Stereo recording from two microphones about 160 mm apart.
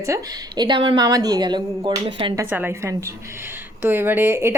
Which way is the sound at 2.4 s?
10° right (ahead or behind).